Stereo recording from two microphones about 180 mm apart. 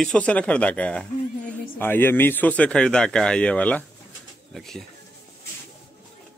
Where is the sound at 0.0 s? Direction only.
5° left (ahead or behind).